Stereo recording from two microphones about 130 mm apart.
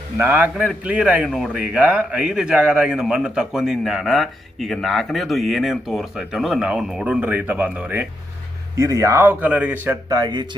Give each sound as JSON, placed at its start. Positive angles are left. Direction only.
{"t": 0.2, "sound": "a man's voice", "side_deg": -15}
{"t": 8.7, "sound": "speech", "side_deg": -25}